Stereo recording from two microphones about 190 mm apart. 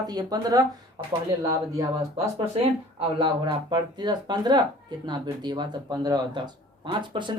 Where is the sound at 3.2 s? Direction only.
25° right (ahead or behind).